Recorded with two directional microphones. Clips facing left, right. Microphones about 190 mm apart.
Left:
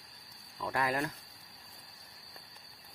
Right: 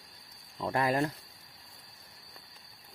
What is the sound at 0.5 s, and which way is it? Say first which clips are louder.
Speech: right 4 dB; 30° right (ahead or behind).